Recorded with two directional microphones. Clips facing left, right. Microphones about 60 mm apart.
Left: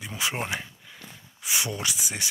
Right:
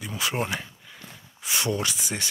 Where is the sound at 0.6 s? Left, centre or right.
Centre.